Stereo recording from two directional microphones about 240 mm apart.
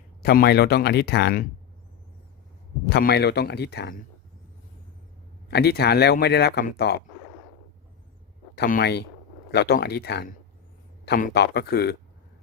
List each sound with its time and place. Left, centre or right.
0.2 s speech: left
2.9 s speech: left
5.5 s speech: left
8.5 s speech: left